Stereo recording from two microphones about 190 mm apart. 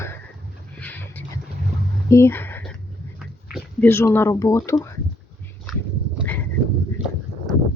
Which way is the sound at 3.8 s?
10° left (ahead or behind).